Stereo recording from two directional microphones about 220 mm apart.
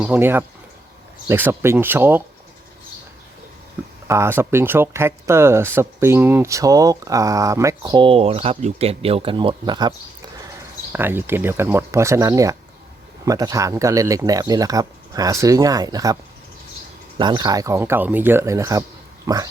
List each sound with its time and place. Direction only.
0.0 s speech: 10° right (ahead or behind)
4.0 s speech: 10° right (ahead or behind)
10.9 s speech: 10° right (ahead or behind)
17.2 s speech: 20° right (ahead or behind)